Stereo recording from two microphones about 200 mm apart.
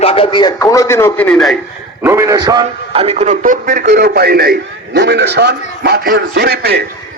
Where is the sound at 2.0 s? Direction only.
10° right (ahead or behind).